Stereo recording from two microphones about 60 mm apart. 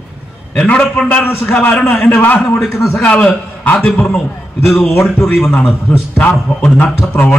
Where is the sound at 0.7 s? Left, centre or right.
Left.